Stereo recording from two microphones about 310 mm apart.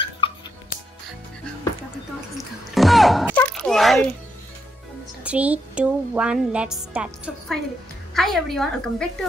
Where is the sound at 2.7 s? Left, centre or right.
Centre.